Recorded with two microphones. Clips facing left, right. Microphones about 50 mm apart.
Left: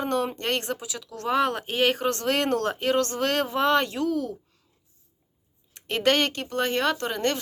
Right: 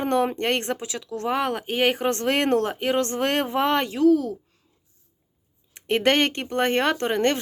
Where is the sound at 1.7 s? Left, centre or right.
Right.